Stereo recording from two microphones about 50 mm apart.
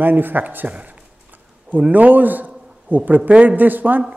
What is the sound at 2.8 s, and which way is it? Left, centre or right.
Speech, right.